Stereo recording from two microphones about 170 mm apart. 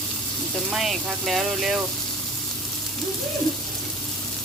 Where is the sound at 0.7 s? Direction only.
Centre (ahead or behind).